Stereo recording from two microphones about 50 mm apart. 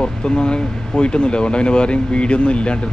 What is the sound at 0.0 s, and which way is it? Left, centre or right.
Speech, centre.